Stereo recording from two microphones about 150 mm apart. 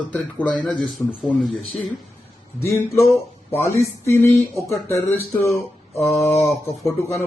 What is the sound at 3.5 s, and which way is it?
Speech, 20° left (ahead or behind).